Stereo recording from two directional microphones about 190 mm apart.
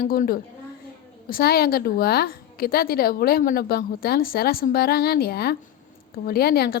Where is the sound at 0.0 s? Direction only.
50° left (ahead or behind).